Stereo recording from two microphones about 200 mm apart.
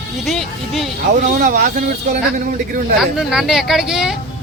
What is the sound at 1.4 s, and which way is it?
Speech, 40° right (ahead or behind).